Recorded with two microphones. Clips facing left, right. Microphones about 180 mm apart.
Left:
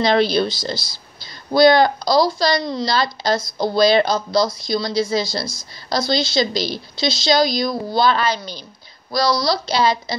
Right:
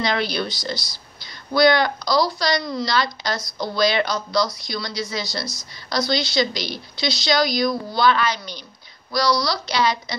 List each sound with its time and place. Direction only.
0.0 s speech: 30° left (ahead or behind)